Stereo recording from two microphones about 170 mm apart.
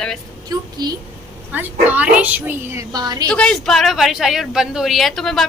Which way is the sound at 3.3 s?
5° left (ahead or behind).